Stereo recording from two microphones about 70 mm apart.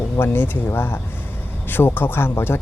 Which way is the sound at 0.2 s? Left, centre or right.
Left.